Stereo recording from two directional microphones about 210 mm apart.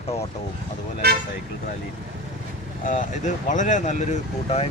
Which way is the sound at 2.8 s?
35° left (ahead or behind).